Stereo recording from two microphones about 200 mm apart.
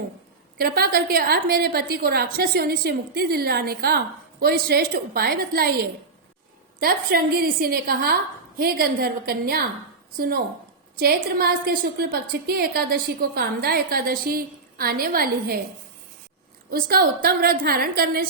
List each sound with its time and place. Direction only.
0.6 s a woman's voice: 50° right (ahead or behind)
6.7 s a woman's voice: 50° right (ahead or behind)
16.6 s a woman's voice: 50° right (ahead or behind)